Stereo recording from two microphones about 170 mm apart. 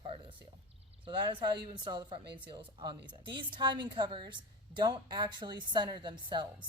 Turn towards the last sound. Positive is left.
turn(degrees=-25)  # may be behind; listen again after turning